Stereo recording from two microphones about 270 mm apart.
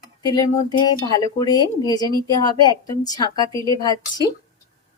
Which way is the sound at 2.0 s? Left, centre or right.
Centre.